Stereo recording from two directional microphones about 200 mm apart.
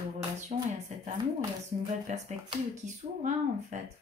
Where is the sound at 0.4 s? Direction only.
35° right (ahead or behind).